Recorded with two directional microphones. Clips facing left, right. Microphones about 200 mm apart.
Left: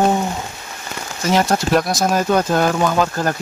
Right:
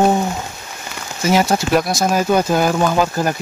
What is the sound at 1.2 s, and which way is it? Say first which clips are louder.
Speech: right 1 dB; 5° right (ahead or behind).